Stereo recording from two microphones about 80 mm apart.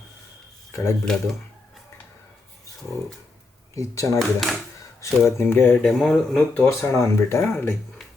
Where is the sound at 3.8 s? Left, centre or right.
Left.